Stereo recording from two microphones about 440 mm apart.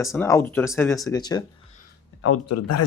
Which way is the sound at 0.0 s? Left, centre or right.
Centre.